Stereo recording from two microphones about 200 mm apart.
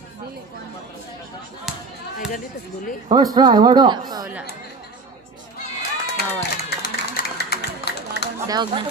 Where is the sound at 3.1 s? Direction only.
20° right (ahead or behind).